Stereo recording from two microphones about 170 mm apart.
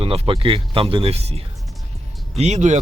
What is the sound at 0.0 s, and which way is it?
Speech, 35° right (ahead or behind).